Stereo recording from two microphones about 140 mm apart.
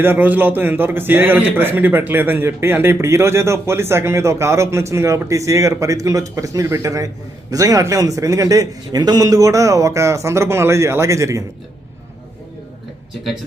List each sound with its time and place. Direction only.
0.0 s a man's voice: 15° right (ahead or behind)